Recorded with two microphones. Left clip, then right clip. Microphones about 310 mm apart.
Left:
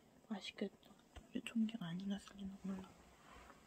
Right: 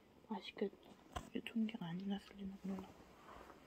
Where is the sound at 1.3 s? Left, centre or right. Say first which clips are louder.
Left 2 dB; centre.